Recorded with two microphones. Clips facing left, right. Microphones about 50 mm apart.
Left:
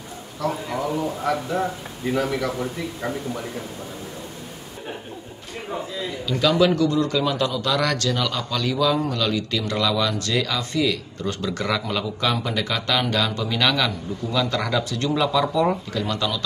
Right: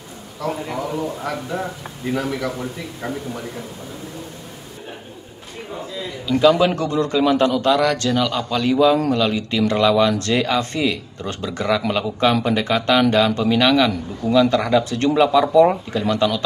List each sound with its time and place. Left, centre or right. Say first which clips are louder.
0.4 s a man's voice: even; centre
6.7 s a man's voice: even; right
8.0 s speech: right 4 dB; centre
11.9 s a man's voice: right 6 dB; right
14.9 s speech: right 6 dB; right